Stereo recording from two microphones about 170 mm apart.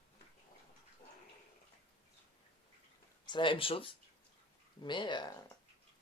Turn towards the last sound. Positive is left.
turn(degrees=25)  # may be behind; listen again after turning